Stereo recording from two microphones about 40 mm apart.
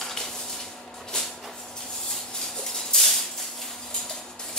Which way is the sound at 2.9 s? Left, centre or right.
Centre.